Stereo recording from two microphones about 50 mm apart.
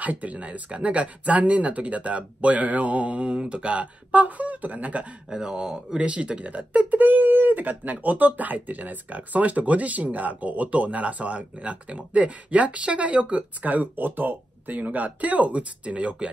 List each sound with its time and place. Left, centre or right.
0.0 s speech: right
5.3 s speech: centre